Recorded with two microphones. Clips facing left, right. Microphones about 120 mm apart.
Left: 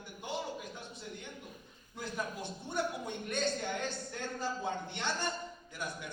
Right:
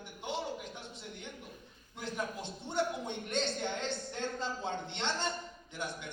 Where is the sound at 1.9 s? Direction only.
20° right (ahead or behind).